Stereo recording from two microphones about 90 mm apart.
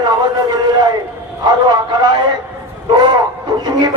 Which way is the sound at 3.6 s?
55° right (ahead or behind).